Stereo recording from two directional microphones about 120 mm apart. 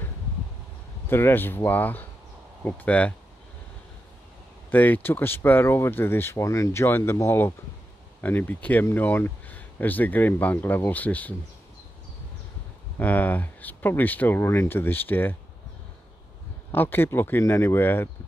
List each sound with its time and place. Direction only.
1.0 s speech: 20° left (ahead or behind)
4.6 s speech: 15° left (ahead or behind)
13.0 s speech: 15° left (ahead or behind)
16.7 s speech: 15° left (ahead or behind)